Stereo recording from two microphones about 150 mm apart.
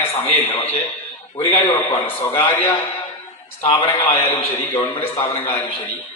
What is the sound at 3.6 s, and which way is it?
A man's voice, 35° left (ahead or behind).